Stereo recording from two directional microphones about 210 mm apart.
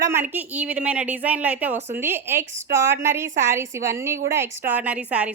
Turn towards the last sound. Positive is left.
turn(degrees=-5)  # may be behind; listen again after turning